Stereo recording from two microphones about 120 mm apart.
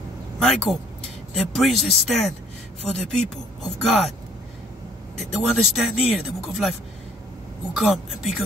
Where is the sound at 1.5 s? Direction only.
Centre (ahead or behind).